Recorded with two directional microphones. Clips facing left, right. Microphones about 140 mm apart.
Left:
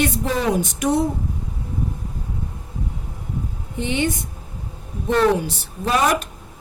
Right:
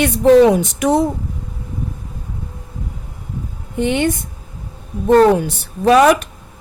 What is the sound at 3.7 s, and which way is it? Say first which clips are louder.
Speech: right 6 dB; 55° right (ahead or behind).